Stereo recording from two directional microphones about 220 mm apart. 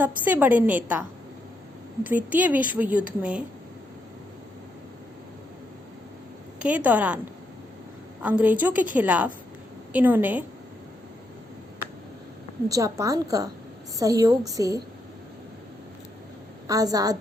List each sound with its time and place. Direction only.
0.3 s a woman's voice: 10° right (ahead or behind)
2.0 s a woman's voice: 5° right (ahead or behind)
6.6 s a woman's voice: 5° right (ahead or behind)
8.2 s a woman's voice: 5° right (ahead or behind)
12.6 s a woman's voice: 15° right (ahead or behind)
16.6 s a woman's voice: 15° right (ahead or behind)